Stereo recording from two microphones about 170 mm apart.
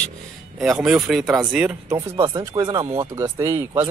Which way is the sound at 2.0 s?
20° right (ahead or behind).